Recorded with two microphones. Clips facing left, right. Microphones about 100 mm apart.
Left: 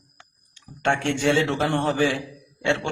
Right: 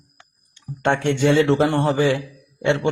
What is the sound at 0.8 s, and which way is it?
Speech, 20° right (ahead or behind).